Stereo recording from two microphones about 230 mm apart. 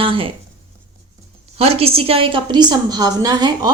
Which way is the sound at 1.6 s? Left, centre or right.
Right.